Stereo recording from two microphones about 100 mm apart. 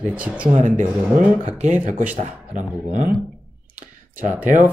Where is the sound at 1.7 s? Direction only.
15° right (ahead or behind).